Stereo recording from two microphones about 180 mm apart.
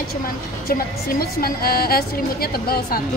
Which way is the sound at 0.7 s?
55° left (ahead or behind).